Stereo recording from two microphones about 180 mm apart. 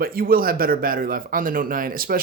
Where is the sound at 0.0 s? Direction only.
55° right (ahead or behind).